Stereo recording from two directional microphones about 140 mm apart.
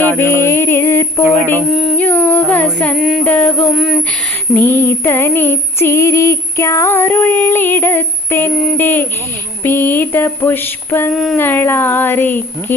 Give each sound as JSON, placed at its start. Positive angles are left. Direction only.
{"t": 0.0, "sound": "music", "side_deg": 15}
{"t": 1.7, "sound": "a sound", "side_deg": 0}
{"t": 2.0, "sound": "carnatic music", "side_deg": 10}
{"t": 2.8, "sound": "music", "side_deg": 5}
{"t": 3.2, "sound": "a sound", "side_deg": 10}
{"t": 4.5, "sound": "female singing", "side_deg": 15}
{"t": 11.1, "sound": "music", "side_deg": 0}
{"t": 11.3, "sound": "female singing", "side_deg": 15}